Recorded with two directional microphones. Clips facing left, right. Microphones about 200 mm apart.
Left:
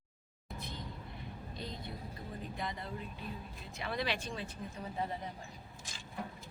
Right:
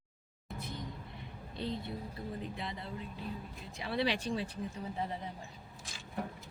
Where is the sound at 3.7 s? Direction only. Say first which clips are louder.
Right 4 dB; 30° right (ahead or behind).